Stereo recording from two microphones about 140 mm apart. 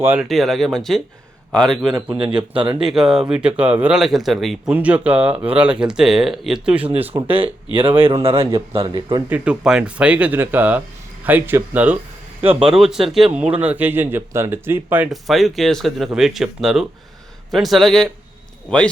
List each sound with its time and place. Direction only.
0.0 s speech: 15° right (ahead or behind)
0.3 s speech: centre (ahead or behind)
2.0 s a man's voice: 35° right (ahead or behind)
2.8 s speech: 5° right (ahead or behind)
4.7 s speech: 10° right (ahead or behind)
7.1 s speech: 25° right (ahead or behind)
8.2 s a man's voice: 40° right (ahead or behind)
9.3 s speech: 10° right (ahead or behind)
12.4 s a man's voice: 45° right (ahead or behind)
12.6 s speech: 5° right (ahead or behind)
15.1 s speech: centre (ahead or behind)